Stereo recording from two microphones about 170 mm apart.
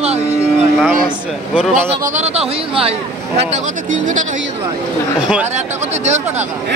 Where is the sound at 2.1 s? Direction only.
40° right (ahead or behind).